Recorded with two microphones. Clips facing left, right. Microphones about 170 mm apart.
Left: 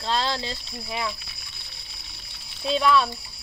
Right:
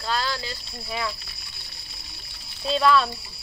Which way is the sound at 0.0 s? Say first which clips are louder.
Left 2 dB; 25° left (ahead or behind).